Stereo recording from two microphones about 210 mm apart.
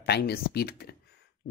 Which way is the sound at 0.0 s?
50° left (ahead or behind).